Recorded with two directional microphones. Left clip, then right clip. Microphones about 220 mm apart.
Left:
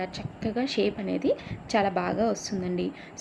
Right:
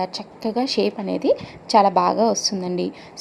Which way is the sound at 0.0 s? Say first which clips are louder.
Right 7 dB; 20° right (ahead or behind).